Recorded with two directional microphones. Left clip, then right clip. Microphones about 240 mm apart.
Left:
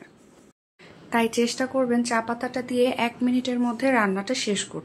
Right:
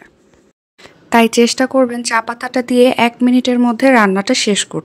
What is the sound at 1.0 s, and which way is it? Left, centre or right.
Speech, right.